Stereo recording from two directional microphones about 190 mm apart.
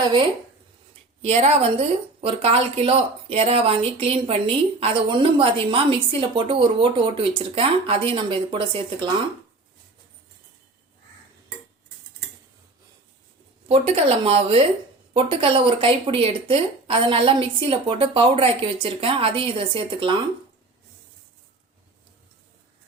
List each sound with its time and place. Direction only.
1.2 s a woman's voice: 35° right (ahead or behind)
13.7 s a woman's voice: 30° right (ahead or behind)